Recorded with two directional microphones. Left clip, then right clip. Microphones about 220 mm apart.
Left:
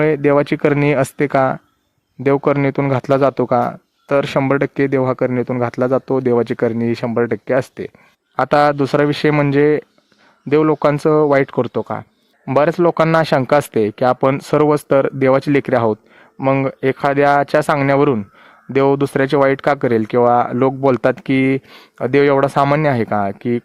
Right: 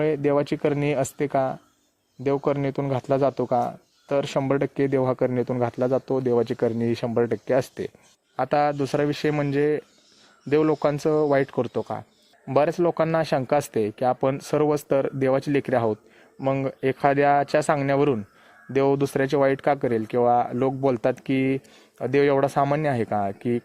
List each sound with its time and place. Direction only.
0.0 s speech: 15° left (ahead or behind)